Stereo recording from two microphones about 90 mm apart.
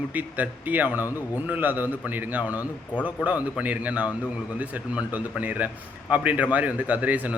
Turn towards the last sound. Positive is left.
turn(degrees=-15)  # may be behind; listen again after turning